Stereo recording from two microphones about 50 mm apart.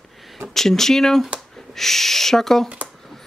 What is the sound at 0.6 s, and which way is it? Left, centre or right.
Speech, centre.